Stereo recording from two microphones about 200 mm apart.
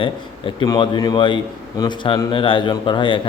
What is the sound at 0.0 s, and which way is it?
A man's voice, 25° left (ahead or behind).